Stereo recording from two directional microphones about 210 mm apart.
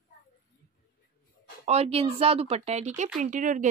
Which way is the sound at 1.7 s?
30° right (ahead or behind).